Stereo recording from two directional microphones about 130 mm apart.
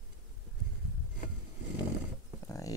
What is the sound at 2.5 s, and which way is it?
Horse, 25° left (ahead or behind).